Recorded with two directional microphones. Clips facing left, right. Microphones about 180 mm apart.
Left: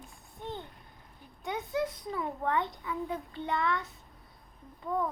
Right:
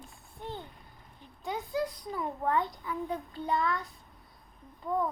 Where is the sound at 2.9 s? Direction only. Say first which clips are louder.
Even; 35° right (ahead or behind).